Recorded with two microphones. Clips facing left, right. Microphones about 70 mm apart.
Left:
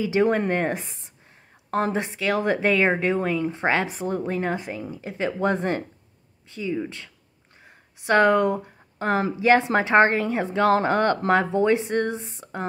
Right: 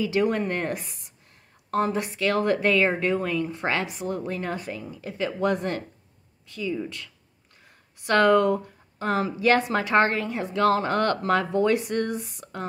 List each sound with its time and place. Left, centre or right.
0.0 s speech: left